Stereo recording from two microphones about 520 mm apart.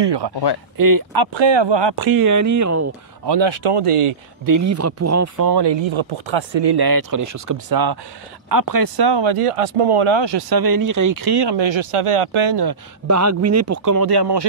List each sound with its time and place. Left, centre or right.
0.0 s speech: right
0.7 s speech: right
3.3 s speech: right
4.5 s speech: right
5.5 s speech: right
13.0 s speech: right